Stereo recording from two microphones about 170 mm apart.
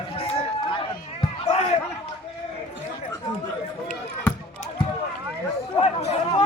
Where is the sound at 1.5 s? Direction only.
40° left (ahead or behind).